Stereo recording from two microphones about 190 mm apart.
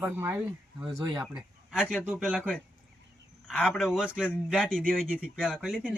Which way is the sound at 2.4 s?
5° left (ahead or behind).